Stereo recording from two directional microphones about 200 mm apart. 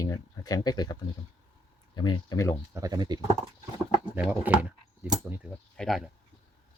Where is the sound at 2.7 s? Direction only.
20° right (ahead or behind).